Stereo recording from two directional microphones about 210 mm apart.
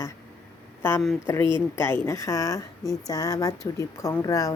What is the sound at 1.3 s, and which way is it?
A woman's voice, 10° left (ahead or behind).